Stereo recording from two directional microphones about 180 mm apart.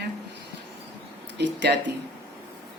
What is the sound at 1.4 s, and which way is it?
Speech, 70° right (ahead or behind).